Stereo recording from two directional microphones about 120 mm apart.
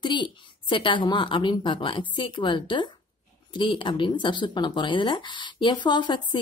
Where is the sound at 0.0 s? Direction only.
40° left (ahead or behind).